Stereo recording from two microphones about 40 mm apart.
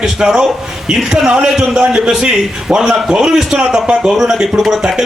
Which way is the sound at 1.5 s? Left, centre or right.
Centre.